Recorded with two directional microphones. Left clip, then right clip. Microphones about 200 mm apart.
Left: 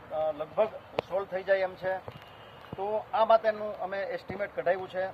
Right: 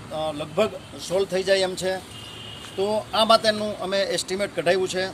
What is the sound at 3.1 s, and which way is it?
A man's voice, 40° right (ahead or behind).